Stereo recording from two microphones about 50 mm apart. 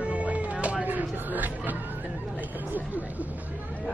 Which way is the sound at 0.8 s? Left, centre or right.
Right.